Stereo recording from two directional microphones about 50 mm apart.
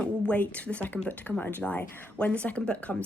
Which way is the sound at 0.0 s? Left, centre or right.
Left.